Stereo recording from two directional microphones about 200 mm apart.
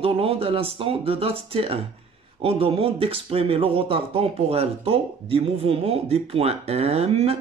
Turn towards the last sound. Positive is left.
turn(degrees=-30)  # may be behind; listen again after turning